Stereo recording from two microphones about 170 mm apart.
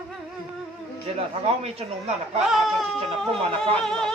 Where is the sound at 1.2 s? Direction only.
35° right (ahead or behind).